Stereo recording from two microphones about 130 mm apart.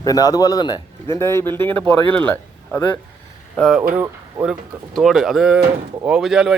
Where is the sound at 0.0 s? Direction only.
30° left (ahead or behind).